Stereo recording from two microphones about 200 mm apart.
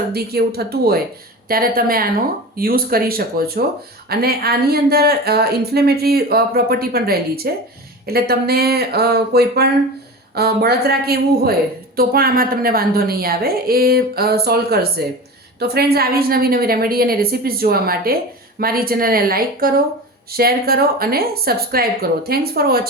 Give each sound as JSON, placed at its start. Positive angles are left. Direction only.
{"t": 0.1, "sound": "speech", "side_deg": -50}